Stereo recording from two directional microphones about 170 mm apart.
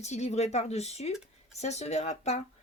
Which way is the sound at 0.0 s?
40° left (ahead or behind).